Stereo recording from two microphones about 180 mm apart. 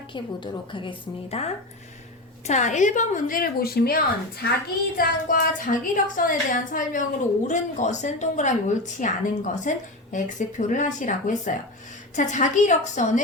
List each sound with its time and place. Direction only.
0.1 s a woman's voice: 25° left (ahead or behind); by 13.2 s 45° left (ahead or behind)